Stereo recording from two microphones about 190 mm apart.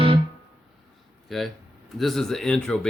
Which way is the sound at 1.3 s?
Centre (ahead or behind).